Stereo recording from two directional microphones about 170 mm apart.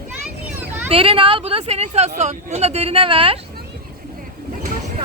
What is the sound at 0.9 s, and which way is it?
Speech, 35° right (ahead or behind).